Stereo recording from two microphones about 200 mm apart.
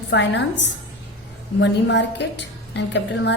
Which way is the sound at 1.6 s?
60° left (ahead or behind).